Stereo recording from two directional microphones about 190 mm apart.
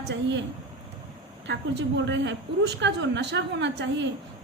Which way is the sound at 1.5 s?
65° right (ahead or behind).